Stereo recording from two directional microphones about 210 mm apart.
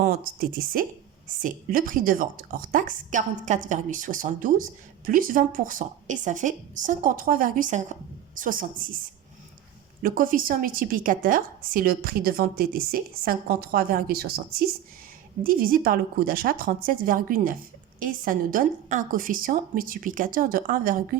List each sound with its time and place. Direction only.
0.0 s a woman's voice: 45° right (ahead or behind)
10.0 s a woman's voice: 40° right (ahead or behind)
15.4 s a woman's voice: 45° right (ahead or behind)